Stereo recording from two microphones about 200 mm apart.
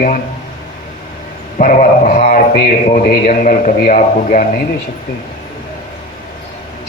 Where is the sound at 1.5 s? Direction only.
40° left (ahead or behind).